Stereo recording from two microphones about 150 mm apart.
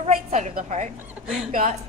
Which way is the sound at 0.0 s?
50° right (ahead or behind).